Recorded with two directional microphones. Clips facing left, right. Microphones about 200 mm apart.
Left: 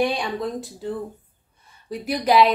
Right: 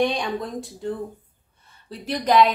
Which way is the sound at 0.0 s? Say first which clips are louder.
Even; 5° left (ahead or behind).